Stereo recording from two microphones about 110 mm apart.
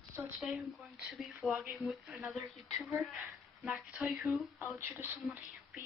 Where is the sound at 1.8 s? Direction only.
30° left (ahead or behind).